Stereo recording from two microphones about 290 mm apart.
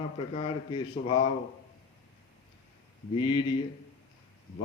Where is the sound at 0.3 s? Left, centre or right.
Centre.